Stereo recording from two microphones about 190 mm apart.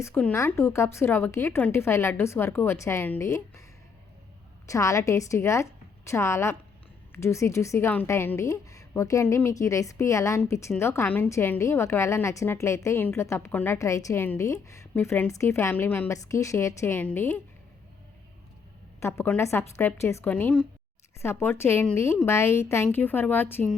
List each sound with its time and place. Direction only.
0.0 s a woman's voice: 10° left (ahead or behind)
4.6 s a woman's voice: 15° left (ahead or behind)
18.9 s a woman's voice: 15° left (ahead or behind)